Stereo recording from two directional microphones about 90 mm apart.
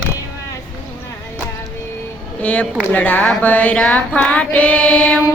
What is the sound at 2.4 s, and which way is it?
Choir, 15° left (ahead or behind).